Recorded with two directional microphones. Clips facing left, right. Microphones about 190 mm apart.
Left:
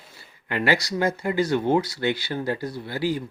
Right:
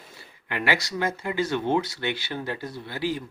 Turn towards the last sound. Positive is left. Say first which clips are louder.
# left 3 dB
turn(degrees=40)  # may be behind; listen again after turning